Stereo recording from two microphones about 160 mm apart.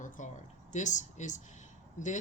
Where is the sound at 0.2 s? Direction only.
50° left (ahead or behind).